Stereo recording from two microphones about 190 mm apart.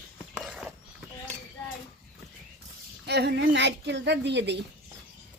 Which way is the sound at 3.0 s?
60° right (ahead or behind).